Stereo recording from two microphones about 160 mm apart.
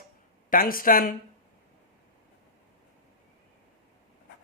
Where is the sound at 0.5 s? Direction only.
65° left (ahead or behind).